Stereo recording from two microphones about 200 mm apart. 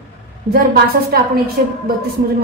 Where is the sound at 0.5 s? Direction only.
50° right (ahead or behind).